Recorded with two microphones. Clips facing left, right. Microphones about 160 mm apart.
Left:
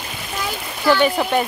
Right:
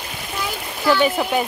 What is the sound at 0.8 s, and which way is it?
Speech, 5° right (ahead or behind).